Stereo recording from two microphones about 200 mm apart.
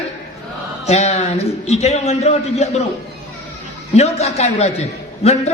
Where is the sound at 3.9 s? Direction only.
30° left (ahead or behind).